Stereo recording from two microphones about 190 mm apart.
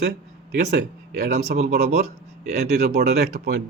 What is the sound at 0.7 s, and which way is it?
Speech, 55° right (ahead or behind).